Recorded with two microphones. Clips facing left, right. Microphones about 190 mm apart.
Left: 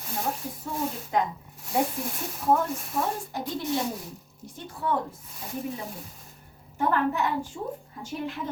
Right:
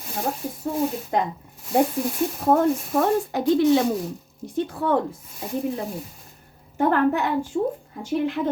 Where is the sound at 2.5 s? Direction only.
75° right (ahead or behind).